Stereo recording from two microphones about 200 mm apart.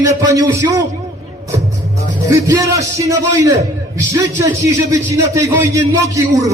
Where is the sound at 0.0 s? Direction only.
15° right (ahead or behind).